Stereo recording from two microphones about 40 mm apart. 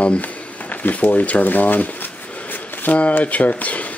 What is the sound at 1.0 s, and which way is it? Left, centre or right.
Speech, left.